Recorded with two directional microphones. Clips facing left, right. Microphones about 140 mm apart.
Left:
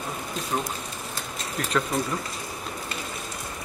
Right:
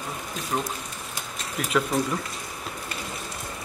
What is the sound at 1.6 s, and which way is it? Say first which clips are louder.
Speech: right 2 dB; 5° right (ahead or behind).